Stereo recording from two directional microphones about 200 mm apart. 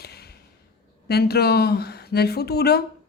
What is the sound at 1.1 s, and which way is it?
A woman's voice, 55° left (ahead or behind).